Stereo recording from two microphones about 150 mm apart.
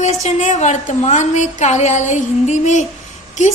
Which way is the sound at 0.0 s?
50° left (ahead or behind).